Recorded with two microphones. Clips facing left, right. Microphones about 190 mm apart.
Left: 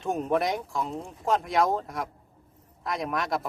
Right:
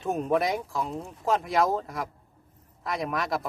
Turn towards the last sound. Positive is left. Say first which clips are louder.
# even
turn(degrees=0)  # may be behind; listen again after turning